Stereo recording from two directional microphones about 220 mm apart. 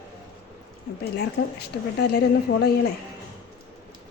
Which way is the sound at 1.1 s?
50° left (ahead or behind).